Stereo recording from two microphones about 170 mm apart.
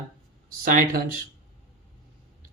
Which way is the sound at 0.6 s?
55° right (ahead or behind).